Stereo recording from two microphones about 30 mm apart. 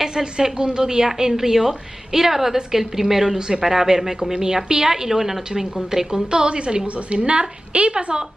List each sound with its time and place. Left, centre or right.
0.0 s a woman's voice: centre
3.3 s a woman's voice: right
6.3 s a woman's voice: right